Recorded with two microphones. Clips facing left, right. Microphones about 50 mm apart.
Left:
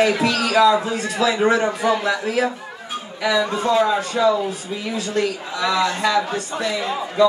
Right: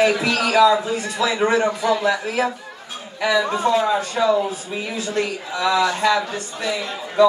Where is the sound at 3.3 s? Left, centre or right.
Right.